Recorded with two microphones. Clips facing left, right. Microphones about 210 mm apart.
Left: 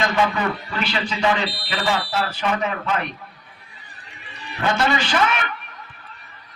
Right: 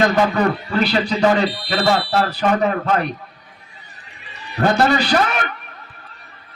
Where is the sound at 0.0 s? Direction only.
40° right (ahead or behind).